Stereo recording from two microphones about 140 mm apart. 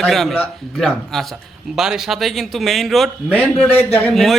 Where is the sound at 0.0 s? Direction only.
Centre (ahead or behind).